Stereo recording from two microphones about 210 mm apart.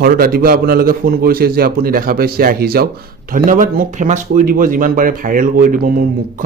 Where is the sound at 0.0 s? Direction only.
45° right (ahead or behind).